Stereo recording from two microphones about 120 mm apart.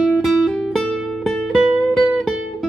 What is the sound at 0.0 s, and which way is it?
Music, centre (ahead or behind).